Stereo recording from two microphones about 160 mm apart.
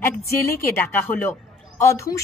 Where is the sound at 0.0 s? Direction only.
15° left (ahead or behind).